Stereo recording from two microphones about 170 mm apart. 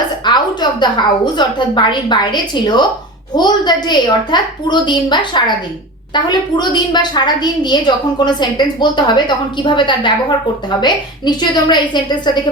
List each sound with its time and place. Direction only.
0.3 s a woman's voice: 25° left (ahead or behind)